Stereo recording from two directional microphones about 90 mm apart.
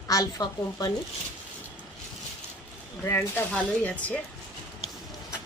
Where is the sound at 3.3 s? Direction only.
15° left (ahead or behind).